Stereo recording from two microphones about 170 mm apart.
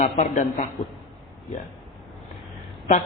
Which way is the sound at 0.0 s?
45° left (ahead or behind).